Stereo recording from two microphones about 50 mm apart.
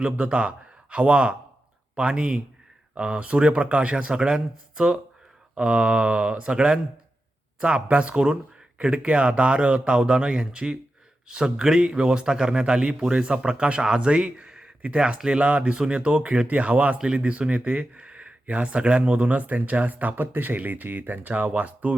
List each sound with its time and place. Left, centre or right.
0.0 s a man's voice: right